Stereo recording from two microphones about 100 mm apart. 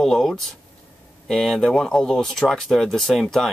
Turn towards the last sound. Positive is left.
turn(degrees=0)  # may be behind; listen again after turning